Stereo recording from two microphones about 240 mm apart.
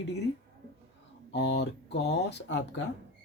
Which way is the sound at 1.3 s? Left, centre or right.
Left.